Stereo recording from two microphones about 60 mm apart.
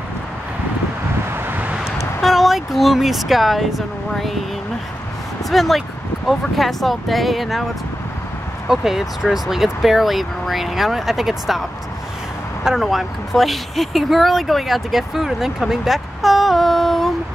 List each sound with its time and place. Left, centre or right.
1.3 s vehicle: right
2.2 s speech: centre
5.5 s speech: centre
8.6 s speech: centre
12.6 s speech: centre